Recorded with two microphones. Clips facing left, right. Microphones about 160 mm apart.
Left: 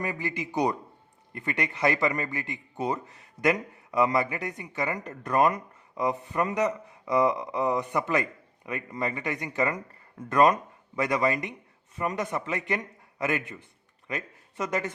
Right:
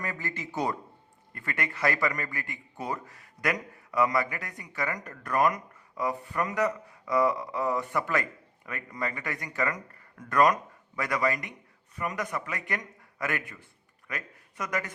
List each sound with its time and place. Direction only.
0.0 s a man's voice: 15° left (ahead or behind)